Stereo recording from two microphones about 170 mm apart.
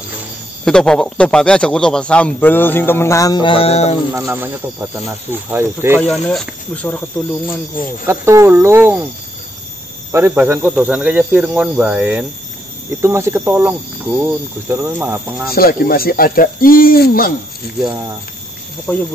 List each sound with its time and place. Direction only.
0.7 s a man's voice: 5° left (ahead or behind); by 3.9 s 35° left (ahead or behind)
4.1 s speech: 15° right (ahead or behind)
6.0 s a man's voice: 5° left (ahead or behind)
8.1 s speech: 15° right (ahead or behind)
10.1 s speech: 10° right (ahead or behind)
15.5 s speech: 60° left (ahead or behind)
18.9 s a man's voice: 10° left (ahead or behind)